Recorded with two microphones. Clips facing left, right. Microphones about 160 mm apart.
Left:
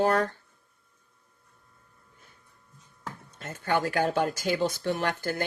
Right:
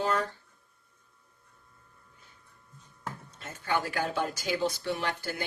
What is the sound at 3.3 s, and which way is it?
Speech, 50° left (ahead or behind).